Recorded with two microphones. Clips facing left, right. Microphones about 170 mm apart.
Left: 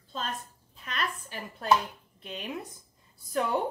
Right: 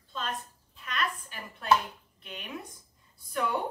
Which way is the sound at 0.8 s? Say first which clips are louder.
Right 1 dB; 35° left (ahead or behind).